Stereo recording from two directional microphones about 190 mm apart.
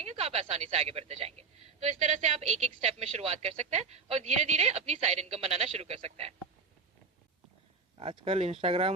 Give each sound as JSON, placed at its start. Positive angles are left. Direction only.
{"t": 0.0, "sound": "a woman's voice", "side_deg": -35}
{"t": 7.9, "sound": "a woman's voice", "side_deg": -30}